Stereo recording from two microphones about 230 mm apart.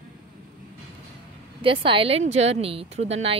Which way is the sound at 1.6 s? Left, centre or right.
Right.